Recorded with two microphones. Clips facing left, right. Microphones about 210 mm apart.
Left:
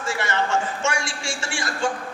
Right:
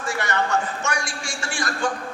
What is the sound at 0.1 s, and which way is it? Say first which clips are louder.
A man's voice: even; 25° left (ahead or behind).